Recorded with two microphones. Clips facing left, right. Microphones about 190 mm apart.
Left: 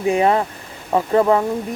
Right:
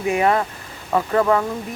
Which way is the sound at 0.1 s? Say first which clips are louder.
Left 2 dB; 25° left (ahead or behind).